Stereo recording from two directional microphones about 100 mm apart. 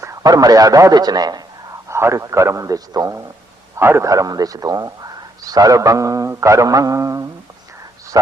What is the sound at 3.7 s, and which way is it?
A man's voice, 25° right (ahead or behind).